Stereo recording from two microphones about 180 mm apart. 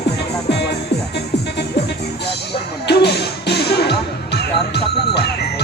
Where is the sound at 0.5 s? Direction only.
65° left (ahead or behind).